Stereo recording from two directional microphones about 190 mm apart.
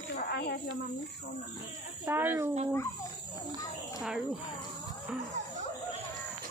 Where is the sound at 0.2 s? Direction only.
55° left (ahead or behind).